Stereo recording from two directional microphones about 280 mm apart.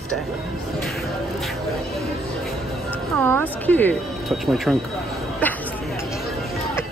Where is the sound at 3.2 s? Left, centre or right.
Centre.